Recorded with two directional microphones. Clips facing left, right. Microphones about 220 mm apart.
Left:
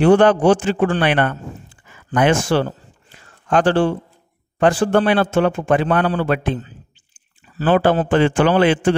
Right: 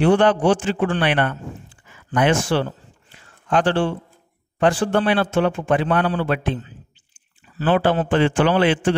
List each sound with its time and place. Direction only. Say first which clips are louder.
0.0 s a man's voice: left 4 dB; 45° left (ahead or behind)
2.1 s a sound: left 2 dB; 45° left (ahead or behind)
4.6 s a man's voice: left 3 dB; 45° left (ahead or behind)